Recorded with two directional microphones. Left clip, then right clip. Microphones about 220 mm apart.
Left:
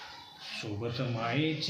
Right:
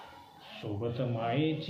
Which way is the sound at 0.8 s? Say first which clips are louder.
Right 2 dB; 15° left (ahead or behind).